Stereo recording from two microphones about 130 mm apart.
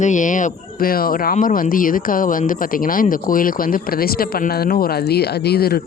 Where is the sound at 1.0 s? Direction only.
90° left.